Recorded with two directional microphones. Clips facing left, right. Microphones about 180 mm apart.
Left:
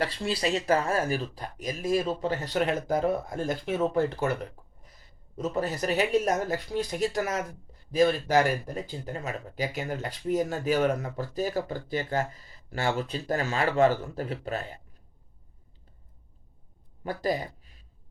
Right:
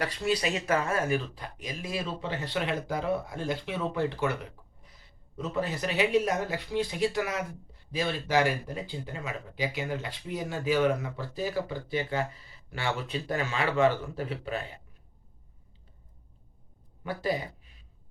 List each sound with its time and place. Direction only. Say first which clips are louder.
0.0 s speech: even; 30° left (ahead or behind)
5.4 s speech: left 2 dB; 40° left (ahead or behind)
17.0 s speech: left 2 dB; 40° left (ahead or behind)